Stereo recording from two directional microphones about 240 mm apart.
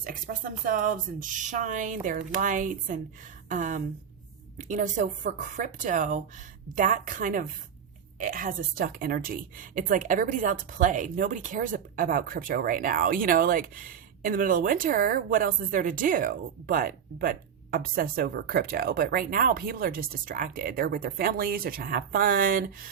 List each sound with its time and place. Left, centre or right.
0.0 s a woman's voice: right